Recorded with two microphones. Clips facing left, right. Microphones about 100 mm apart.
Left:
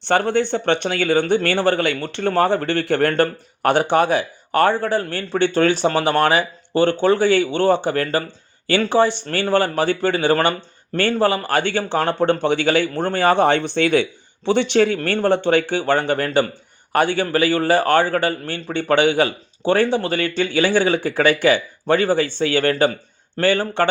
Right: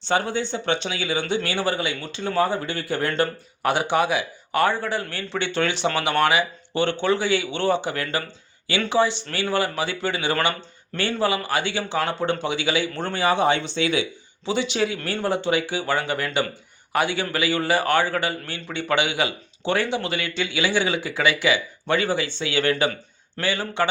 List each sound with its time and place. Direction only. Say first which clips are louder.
0.0 s a man's voice: left 6 dB; 60° left (ahead or behind); by 23.0 s 40° left (ahead or behind)
23.4 s a man's voice: left 6 dB; 50° left (ahead or behind)